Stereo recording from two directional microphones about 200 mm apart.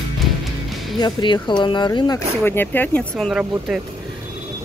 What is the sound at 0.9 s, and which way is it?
Speech, 25° left (ahead or behind).